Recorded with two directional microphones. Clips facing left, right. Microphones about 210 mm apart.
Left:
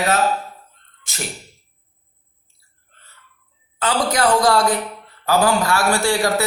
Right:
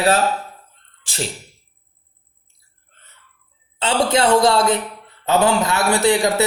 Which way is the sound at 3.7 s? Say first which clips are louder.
Right 2 dB; 25° right (ahead or behind).